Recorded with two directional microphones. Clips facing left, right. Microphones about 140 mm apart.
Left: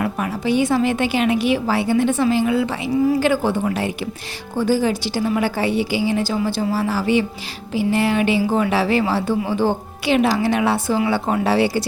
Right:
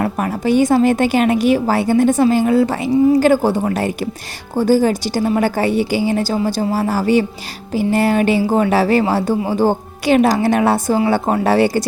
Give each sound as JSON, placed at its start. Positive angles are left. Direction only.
{"t": 0.0, "sound": "a woman's voice", "side_deg": -45}